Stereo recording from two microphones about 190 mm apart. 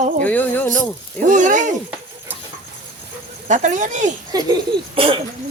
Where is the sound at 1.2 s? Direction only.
40° right (ahead or behind).